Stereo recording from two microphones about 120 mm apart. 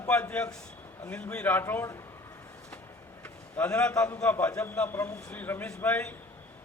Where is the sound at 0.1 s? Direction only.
10° left (ahead or behind).